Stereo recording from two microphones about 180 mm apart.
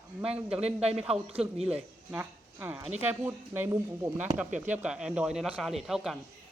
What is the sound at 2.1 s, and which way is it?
Speech, 10° right (ahead or behind).